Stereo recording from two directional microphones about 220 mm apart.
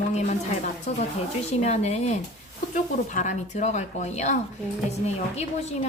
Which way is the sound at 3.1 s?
35° left (ahead or behind).